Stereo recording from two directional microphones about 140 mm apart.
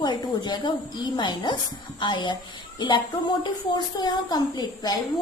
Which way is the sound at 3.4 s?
30° left (ahead or behind).